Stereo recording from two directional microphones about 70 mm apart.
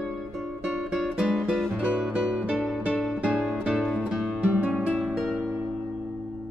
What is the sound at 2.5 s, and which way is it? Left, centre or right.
Music, centre.